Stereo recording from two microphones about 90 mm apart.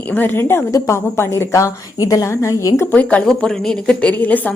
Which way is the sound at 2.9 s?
15° left (ahead or behind).